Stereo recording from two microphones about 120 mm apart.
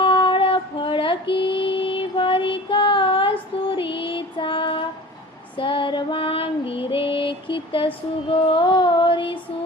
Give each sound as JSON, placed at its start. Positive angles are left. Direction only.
{"t": 0.0, "sound": "female singing", "side_deg": 45}
{"t": 3.8, "sound": "music", "side_deg": 45}
{"t": 5.5, "sound": "female singing", "side_deg": 45}